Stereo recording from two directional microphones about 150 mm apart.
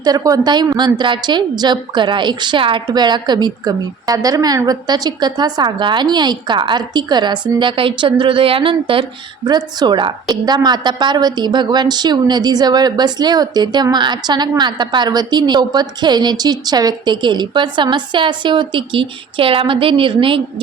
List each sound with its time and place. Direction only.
0.0 s a woman's voice: 25° right (ahead or behind)